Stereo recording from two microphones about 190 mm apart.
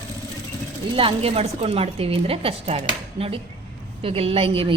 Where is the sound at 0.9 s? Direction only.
30° right (ahead or behind).